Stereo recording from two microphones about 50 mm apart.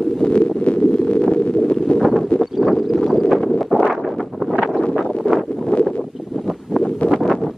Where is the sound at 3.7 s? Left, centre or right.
Centre.